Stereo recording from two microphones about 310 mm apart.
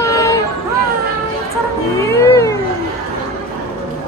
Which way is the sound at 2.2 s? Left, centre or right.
Centre.